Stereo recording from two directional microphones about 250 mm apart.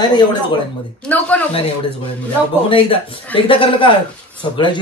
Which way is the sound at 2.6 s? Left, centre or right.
Left.